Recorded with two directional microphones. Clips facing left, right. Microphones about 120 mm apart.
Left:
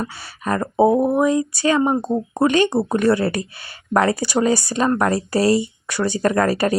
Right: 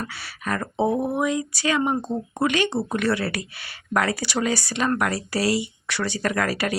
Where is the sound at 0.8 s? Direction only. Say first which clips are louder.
Left 7 dB; 45° left (ahead or behind).